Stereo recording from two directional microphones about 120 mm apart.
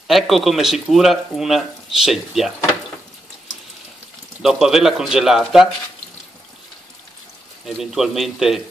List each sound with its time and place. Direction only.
0.1 s speech: centre (ahead or behind)
4.4 s speech: 5° right (ahead or behind)
7.6 s speech: centre (ahead or behind)